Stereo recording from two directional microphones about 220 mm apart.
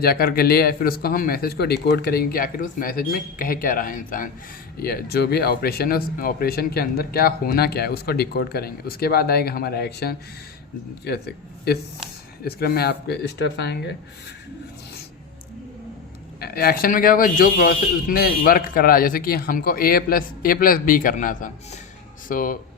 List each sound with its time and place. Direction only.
0.0 s speech: 45° left (ahead or behind)
12.5 s speech: 45° left (ahead or behind)
16.4 s speech: 45° left (ahead or behind)